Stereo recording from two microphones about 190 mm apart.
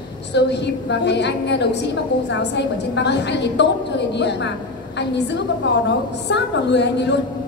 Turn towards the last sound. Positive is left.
turn(degrees=65)  # may be behind; listen again after turning